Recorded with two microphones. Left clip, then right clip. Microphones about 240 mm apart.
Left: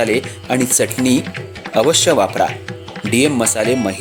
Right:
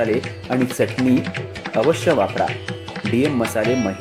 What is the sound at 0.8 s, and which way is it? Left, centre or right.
Speech, left.